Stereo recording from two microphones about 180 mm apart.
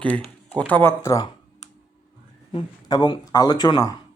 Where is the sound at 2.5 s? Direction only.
25° left (ahead or behind).